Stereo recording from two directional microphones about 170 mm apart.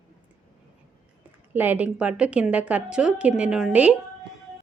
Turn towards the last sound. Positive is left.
turn(degrees=-5)  # may be behind; listen again after turning